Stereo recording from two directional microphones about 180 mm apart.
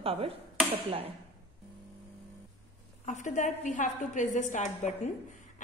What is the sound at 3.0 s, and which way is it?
A woman's voice, 45° left (ahead or behind).